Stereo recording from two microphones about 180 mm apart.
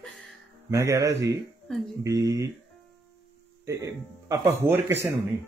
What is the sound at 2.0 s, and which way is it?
Speech, 20° right (ahead or behind).